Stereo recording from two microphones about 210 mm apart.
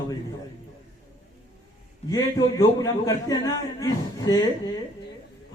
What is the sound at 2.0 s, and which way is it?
A man's voice, 15° left (ahead or behind).